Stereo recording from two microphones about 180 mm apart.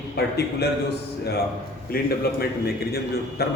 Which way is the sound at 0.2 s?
60° left (ahead or behind).